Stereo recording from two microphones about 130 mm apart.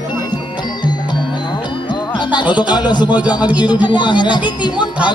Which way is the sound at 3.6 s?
35° left (ahead or behind).